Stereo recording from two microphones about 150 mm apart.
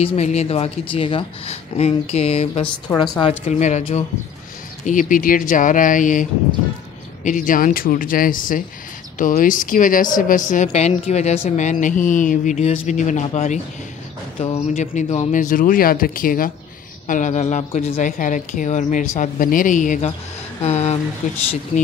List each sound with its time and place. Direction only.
0.0 s speech: 45° left (ahead or behind)
4.8 s a woman's voice: 60° left (ahead or behind)
7.2 s a woman's voice: 60° left (ahead or behind)
14.7 s speech: 55° left (ahead or behind)
15.3 s speech: 65° left (ahead or behind)
17.1 s a woman's voice: 55° left (ahead or behind)
20.6 s speech: 45° left (ahead or behind)